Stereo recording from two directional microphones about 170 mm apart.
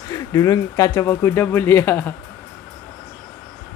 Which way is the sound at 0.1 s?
20° left (ahead or behind).